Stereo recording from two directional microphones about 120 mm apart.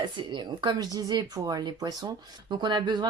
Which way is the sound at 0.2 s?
40° right (ahead or behind).